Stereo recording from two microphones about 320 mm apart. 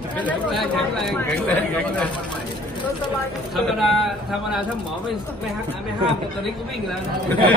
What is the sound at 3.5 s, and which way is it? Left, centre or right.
Speech, centre.